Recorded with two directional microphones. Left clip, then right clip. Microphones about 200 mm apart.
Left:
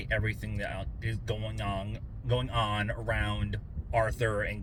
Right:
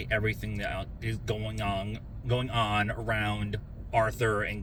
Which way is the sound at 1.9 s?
20° left (ahead or behind).